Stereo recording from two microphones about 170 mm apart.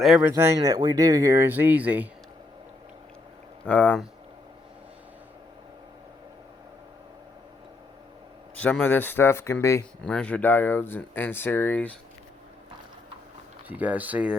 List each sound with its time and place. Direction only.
0.0 s speech: 5° right (ahead or behind)
3.7 s speech: 10° left (ahead or behind)
8.6 s speech: 10° left (ahead or behind)
13.7 s speech: 10° right (ahead or behind)